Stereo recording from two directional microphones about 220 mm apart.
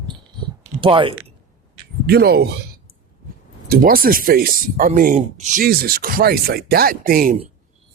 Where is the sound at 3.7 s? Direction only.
40° right (ahead or behind).